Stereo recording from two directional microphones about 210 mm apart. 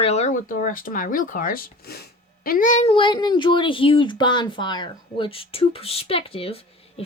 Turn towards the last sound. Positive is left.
turn(degrees=25)  # may be behind; listen again after turning